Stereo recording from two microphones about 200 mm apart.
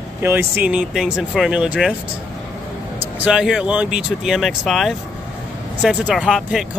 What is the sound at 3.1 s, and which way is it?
Speech, 5° right (ahead or behind).